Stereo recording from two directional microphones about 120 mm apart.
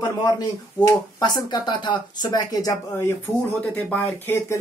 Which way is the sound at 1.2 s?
35° left (ahead or behind).